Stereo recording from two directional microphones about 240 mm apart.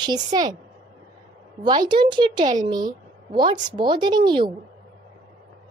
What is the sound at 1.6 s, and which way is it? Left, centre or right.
A woman's voice, centre.